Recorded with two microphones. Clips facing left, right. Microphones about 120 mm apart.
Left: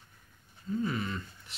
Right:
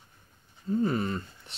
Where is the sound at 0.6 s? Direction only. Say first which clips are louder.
Right 5 dB; 40° right (ahead or behind).